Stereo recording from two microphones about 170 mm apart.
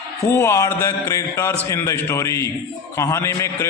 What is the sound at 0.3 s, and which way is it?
A man's voice, 15° left (ahead or behind).